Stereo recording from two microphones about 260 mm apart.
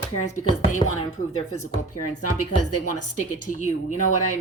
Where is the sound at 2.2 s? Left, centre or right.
Left.